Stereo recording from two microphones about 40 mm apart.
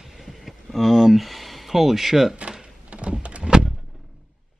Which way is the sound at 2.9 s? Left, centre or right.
Right.